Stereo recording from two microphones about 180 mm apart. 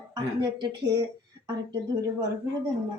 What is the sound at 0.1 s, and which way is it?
Speech, 20° right (ahead or behind).